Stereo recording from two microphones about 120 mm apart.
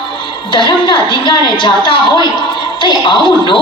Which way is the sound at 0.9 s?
45° left (ahead or behind).